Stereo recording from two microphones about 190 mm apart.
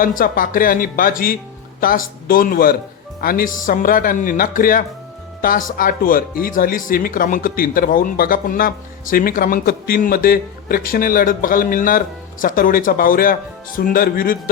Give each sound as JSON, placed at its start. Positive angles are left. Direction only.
{"t": 0.0, "sound": "speech", "side_deg": 45}